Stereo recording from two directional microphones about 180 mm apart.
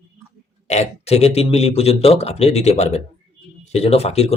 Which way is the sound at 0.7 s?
35° left (ahead or behind).